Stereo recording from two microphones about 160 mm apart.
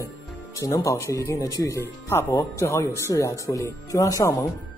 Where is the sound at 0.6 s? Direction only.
20° left (ahead or behind).